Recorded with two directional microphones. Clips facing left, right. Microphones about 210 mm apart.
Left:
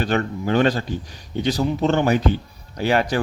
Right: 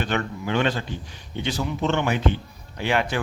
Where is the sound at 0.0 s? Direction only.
40° left (ahead or behind).